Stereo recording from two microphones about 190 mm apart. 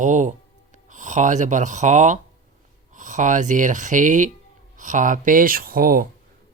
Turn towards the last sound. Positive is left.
turn(degrees=-50)  # may be behind; listen again after turning